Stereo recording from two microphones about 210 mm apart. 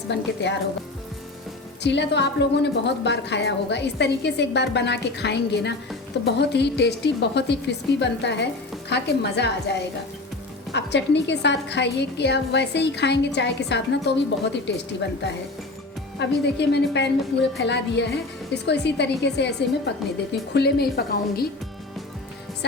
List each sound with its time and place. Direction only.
0.1 s speech: 55° left (ahead or behind)
1.8 s a woman's voice: 55° left (ahead or behind)
16.1 s a woman's voice: 55° left (ahead or behind)